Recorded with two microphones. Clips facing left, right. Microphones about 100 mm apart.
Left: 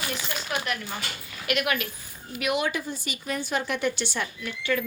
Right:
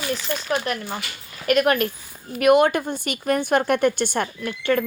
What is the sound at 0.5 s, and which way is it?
A woman's voice, 35° right (ahead or behind).